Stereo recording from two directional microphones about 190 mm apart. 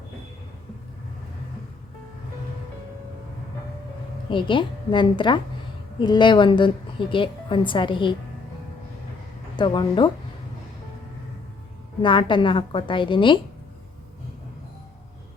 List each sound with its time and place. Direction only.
4.3 s a woman's voice: 25° left (ahead or behind)
9.6 s a woman's voice: 25° left (ahead or behind)
12.0 s a woman's voice: 25° left (ahead or behind)